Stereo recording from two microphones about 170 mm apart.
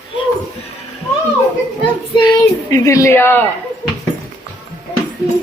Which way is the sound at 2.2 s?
20° left (ahead or behind).